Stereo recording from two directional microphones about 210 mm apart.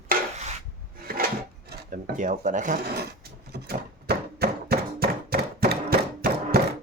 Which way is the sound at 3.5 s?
50° right (ahead or behind).